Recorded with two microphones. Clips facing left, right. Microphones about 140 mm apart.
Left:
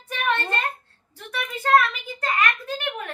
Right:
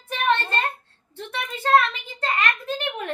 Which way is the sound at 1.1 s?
25° right (ahead or behind).